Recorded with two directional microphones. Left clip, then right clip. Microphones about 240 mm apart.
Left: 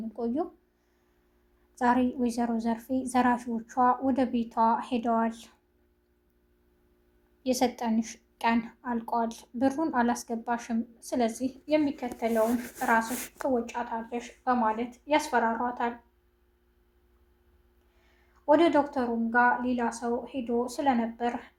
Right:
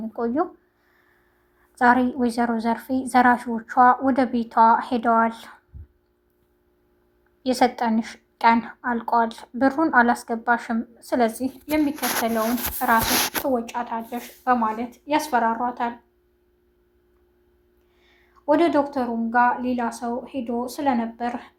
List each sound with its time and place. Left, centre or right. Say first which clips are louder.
0.2 s speech: right 8 dB; centre
1.7 s a woman's voice: right 8 dB; centre
7.4 s a woman's voice: right 8 dB; centre
18.0 s a woman's voice: right 3 dB; right